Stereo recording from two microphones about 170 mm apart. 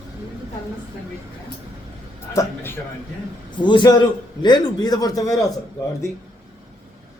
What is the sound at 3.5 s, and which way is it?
A man's voice, 25° left (ahead or behind).